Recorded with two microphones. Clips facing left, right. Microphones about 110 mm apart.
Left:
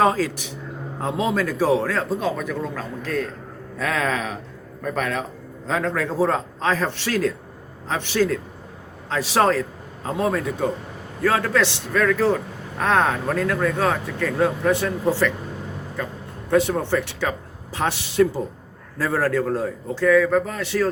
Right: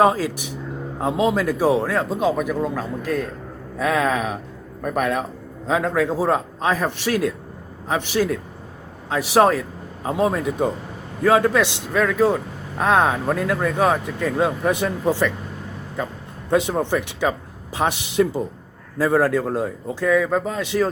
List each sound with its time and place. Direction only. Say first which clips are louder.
0.0 s a man's voice: right 2 dB; 15° right (ahead or behind)
16.5 s a man's voice: even; 20° right (ahead or behind)